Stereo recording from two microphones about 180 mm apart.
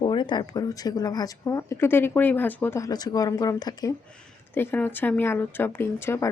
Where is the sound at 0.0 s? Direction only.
25° left (ahead or behind).